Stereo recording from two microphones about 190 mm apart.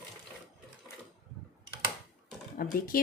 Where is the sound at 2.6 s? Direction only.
50° left (ahead or behind).